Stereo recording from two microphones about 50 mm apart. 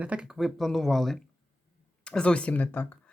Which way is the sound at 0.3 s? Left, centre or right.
Centre.